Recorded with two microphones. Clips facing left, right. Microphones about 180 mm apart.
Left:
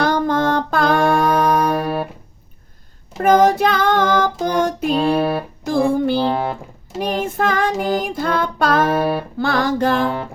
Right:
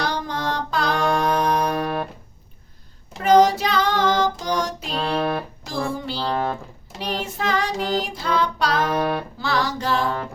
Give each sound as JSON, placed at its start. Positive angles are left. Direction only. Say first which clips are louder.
{"t": 0.0, "sound": "music", "louder": "left 9 dB", "side_deg": 50}
{"t": 3.2, "sound": "child singing", "louder": "left 2 dB", "side_deg": 55}
{"t": 4.9, "sound": "music", "louder": "left 4 dB", "side_deg": 10}
{"t": 5.6, "sound": "music", "louder": "left 13 dB", "side_deg": 55}
{"t": 7.0, "sound": "female singing", "louder": "left 6 dB", "side_deg": 50}
{"t": 8.9, "sound": "music", "louder": "left 4 dB", "side_deg": 10}
{"t": 9.4, "sound": "music", "louder": "left 9 dB", "side_deg": 55}